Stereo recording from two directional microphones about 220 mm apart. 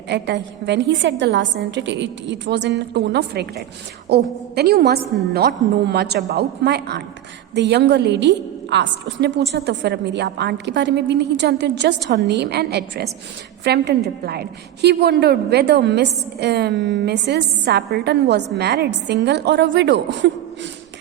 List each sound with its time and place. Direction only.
0.1 s a woman's voice: 50° right (ahead or behind)